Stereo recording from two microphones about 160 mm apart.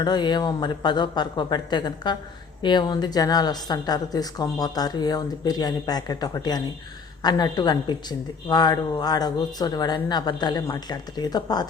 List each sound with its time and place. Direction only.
0.0 s speech: 25° left (ahead or behind)